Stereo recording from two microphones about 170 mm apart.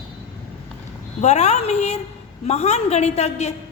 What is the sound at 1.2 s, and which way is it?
A woman's voice, 40° left (ahead or behind).